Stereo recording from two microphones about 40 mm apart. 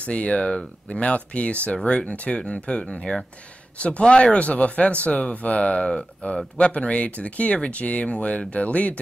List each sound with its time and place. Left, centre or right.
0.0 s speech: left